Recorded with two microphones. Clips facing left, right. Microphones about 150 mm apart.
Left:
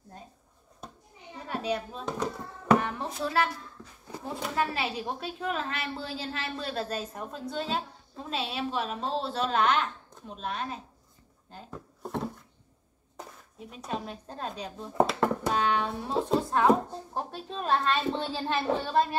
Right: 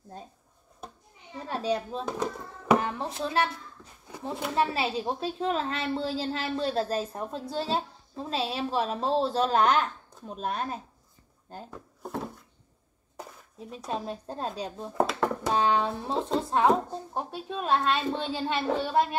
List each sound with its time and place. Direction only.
1.5 s a child's voice: 30° right (ahead or behind)
4.6 s a woman's voice: 25° right (ahead or behind); by 10.8 s 45° right (ahead or behind)
11.7 s drawer open or close: 5° right (ahead or behind)
13.7 s a woman's voice: 35° right (ahead or behind)
15.0 s a sound: centre (ahead or behind)
15.5 s a woman's voice: 30° right (ahead or behind)
16.1 s speech: centre (ahead or behind)
16.3 s speech: 20° right (ahead or behind)